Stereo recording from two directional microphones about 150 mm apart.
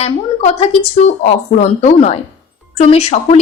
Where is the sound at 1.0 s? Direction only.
55° left (ahead or behind).